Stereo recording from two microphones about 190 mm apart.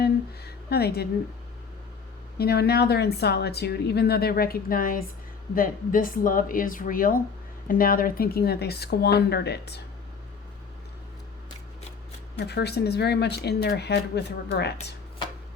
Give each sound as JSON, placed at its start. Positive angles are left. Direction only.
{"t": 0.0, "sound": "a sound", "side_deg": 55}
{"t": 2.4, "sound": "a woman's voice", "side_deg": 55}
{"t": 12.5, "sound": "a woman's voice", "side_deg": 60}